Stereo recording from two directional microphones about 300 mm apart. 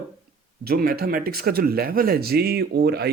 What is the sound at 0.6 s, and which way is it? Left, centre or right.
Speech, right.